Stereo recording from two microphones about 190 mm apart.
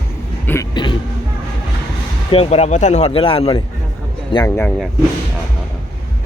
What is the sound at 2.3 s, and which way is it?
Speech, 30° left (ahead or behind).